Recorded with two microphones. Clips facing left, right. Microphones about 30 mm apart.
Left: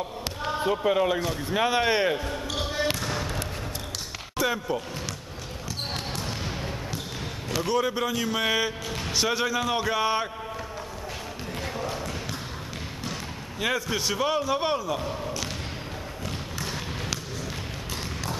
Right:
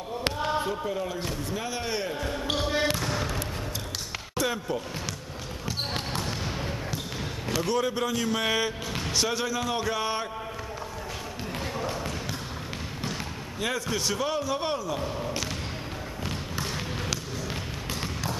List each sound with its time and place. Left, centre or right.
0.4 s basketball bounce: centre
0.8 s a man's voice: left
4.4 s speech: centre
6.2 s basketball bounce: centre
7.5 s speech: centre
11.6 s basketball bounce: centre
13.6 s speech: centre